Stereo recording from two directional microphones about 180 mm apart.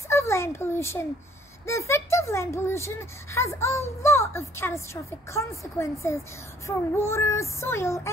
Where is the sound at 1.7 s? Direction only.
15° left (ahead or behind).